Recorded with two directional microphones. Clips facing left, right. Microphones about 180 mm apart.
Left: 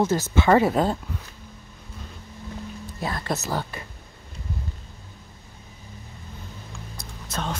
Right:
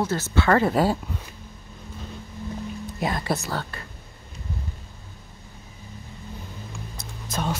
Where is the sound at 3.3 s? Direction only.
10° left (ahead or behind).